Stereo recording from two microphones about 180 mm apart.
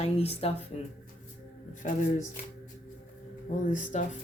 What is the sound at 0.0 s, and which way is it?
Speech, 35° left (ahead or behind).